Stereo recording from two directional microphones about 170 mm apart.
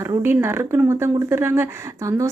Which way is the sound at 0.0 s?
15° right (ahead or behind).